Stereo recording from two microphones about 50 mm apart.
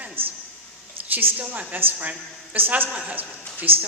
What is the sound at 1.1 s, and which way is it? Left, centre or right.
A man's voice, right.